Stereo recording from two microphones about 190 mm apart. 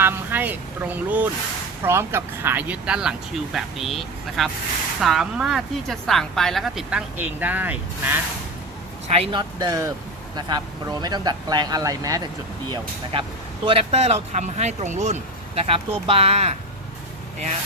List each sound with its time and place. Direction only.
0.0 s a woman's voice: 10° right (ahead or behind)
9.1 s speech: 30° right (ahead or behind)
13.7 s speech: 30° right (ahead or behind)